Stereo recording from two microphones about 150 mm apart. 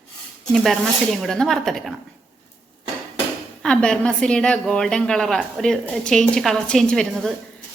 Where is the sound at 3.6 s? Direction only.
5° left (ahead or behind).